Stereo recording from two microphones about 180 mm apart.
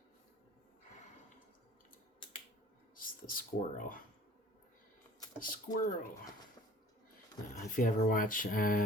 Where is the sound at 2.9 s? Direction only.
50° left (ahead or behind).